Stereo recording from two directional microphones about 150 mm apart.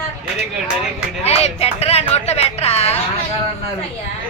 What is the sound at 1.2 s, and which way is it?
Speech, 45° left (ahead or behind).